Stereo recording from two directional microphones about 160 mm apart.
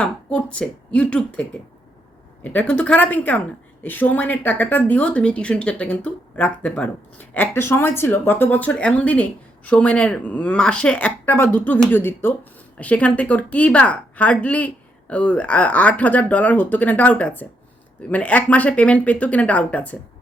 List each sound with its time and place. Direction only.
0.0 s speech: 5° left (ahead or behind)